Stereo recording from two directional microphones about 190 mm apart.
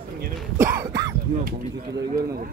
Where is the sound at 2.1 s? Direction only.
50° right (ahead or behind).